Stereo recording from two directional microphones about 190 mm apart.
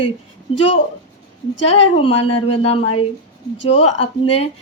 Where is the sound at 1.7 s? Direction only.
30° left (ahead or behind).